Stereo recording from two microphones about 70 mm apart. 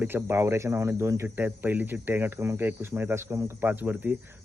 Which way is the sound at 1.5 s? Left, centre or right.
Right.